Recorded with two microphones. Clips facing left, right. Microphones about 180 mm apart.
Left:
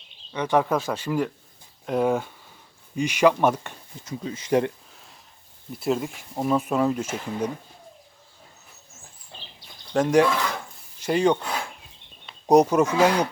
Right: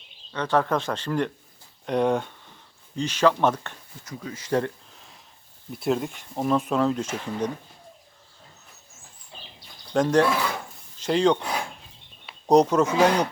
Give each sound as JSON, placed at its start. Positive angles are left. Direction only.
{"t": 0.3, "sound": "speech", "side_deg": 10}
{"t": 4.0, "sound": "speech", "side_deg": 25}
{"t": 5.7, "sound": "speech", "side_deg": 0}
{"t": 9.9, "sound": "speech", "side_deg": 10}
{"t": 10.2, "sound": "a sound", "side_deg": -10}
{"t": 11.0, "sound": "speech", "side_deg": 10}
{"t": 12.5, "sound": "speech", "side_deg": 10}